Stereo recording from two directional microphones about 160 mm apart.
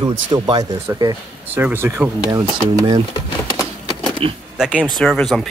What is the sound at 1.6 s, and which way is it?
Speech, 15° right (ahead or behind).